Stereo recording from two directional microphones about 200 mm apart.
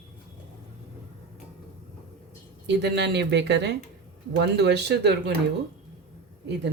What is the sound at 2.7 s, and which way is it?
Speech, 55° right (ahead or behind).